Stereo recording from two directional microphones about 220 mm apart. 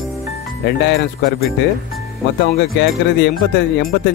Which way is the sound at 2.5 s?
50° left (ahead or behind).